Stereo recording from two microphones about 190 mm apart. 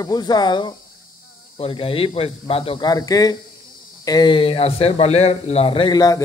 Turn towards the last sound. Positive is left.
turn(degrees=20)  # may be behind; listen again after turning